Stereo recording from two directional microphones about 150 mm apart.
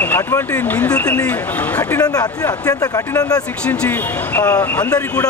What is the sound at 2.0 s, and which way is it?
Speech, 25° left (ahead or behind).